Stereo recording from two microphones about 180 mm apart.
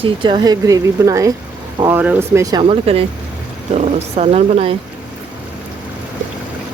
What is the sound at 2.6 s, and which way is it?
Speech, 35° right (ahead or behind).